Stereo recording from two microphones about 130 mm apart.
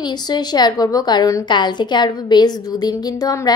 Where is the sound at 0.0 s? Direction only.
35° left (ahead or behind).